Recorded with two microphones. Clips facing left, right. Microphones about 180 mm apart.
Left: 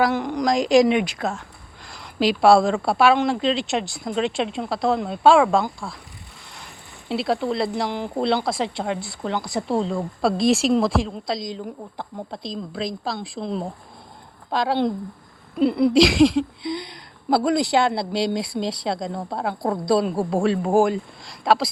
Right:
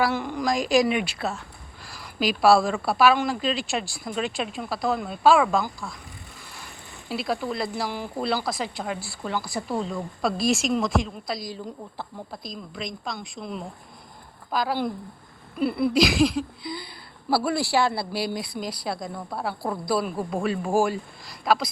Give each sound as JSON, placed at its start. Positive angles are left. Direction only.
{"t": 0.0, "sound": "speech", "side_deg": 20}
{"t": 7.1, "sound": "speech", "side_deg": 25}